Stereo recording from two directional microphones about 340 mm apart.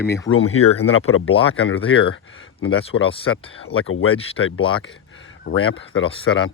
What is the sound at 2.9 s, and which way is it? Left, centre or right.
Speech, left.